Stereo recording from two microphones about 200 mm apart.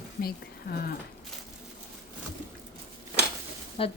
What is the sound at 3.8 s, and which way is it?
Speech, 25° left (ahead or behind).